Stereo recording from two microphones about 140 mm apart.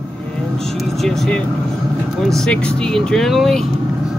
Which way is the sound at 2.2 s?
5° left (ahead or behind).